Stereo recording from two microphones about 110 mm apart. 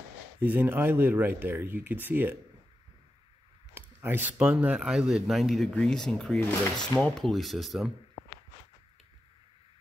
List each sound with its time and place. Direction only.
0.4 s speech: 15° right (ahead or behind)
3.7 s a sound: 20° right (ahead or behind)
4.4 s speech: 10° right (ahead or behind)